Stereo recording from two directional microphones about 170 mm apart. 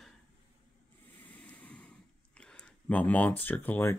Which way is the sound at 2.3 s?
5° left (ahead or behind).